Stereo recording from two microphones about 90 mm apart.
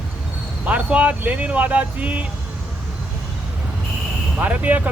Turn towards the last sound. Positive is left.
turn(degrees=-20)  # may be behind; listen again after turning